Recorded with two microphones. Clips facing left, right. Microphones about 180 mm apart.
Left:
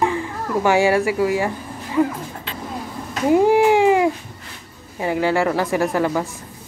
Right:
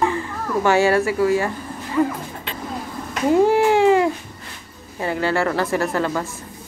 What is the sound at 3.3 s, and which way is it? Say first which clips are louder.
A woman's voice: left 1 dB; 15° left (ahead or behind).